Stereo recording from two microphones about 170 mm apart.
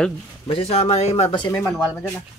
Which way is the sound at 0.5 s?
35° left (ahead or behind).